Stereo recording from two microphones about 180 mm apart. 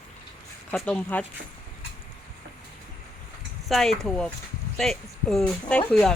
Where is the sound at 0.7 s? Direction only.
5° left (ahead or behind).